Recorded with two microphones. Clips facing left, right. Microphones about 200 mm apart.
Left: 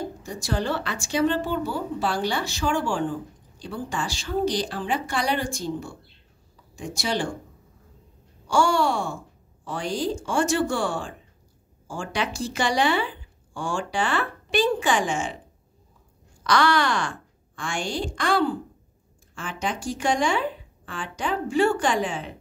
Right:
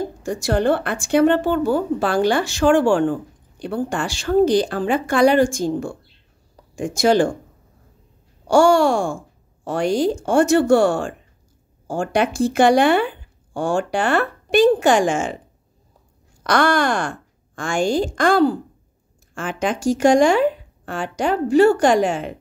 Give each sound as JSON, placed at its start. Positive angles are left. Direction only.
{"t": 0.3, "sound": "a woman's voice", "side_deg": -70}
{"t": 1.6, "sound": "speech", "side_deg": -50}
{"t": 2.4, "sound": "speech", "side_deg": -80}
{"t": 8.5, "sound": "a sound", "side_deg": -70}
{"t": 8.8, "sound": "speech", "side_deg": -45}
{"t": 9.7, "sound": "a woman's voice", "side_deg": -70}
{"t": 11.9, "sound": "speech", "side_deg": -55}
{"t": 14.9, "sound": "speech", "side_deg": -45}
{"t": 16.4, "sound": "speech", "side_deg": -50}
{"t": 19.6, "sound": "speech", "side_deg": -45}
{"t": 21.5, "sound": "a woman's voice", "side_deg": -40}